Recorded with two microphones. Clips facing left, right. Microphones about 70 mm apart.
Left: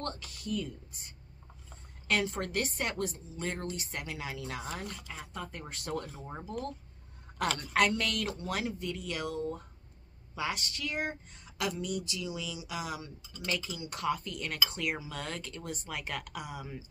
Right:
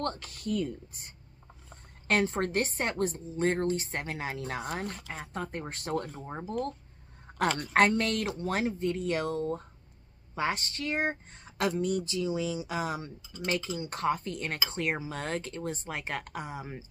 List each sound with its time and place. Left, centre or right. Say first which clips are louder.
0.0 s speech: right 5 dB; right
2.0 s speech: right 4 dB; right
7.3 s a sound: right 5 dB; right
7.7 s speech: right 4 dB; right